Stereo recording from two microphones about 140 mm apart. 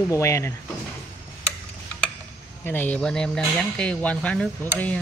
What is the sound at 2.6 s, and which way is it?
Speech, 15° left (ahead or behind).